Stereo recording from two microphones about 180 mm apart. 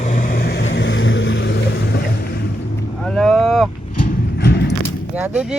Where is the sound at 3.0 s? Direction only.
Centre (ahead or behind).